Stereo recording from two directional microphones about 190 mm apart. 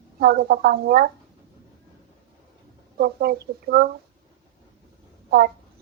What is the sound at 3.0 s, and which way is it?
Speech, 55° right (ahead or behind).